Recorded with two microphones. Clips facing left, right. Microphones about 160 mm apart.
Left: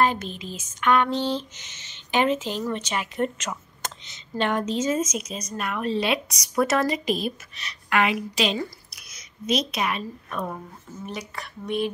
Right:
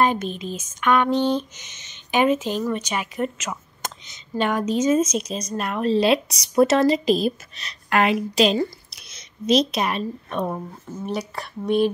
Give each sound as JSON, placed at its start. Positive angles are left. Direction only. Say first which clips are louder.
{"t": 0.0, "sound": "a sound", "louder": "right 2 dB", "side_deg": -20}
{"t": 3.2, "sound": "speech", "louder": "even", "side_deg": -5}
{"t": 5.0, "sound": "a woman's voice", "louder": "right 5 dB", "side_deg": -30}